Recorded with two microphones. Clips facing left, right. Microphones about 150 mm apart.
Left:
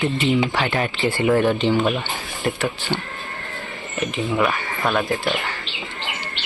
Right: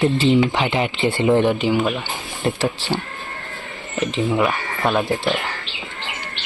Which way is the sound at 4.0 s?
20° right (ahead or behind).